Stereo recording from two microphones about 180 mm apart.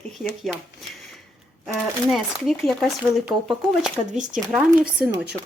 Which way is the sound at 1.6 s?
Centre (ahead or behind).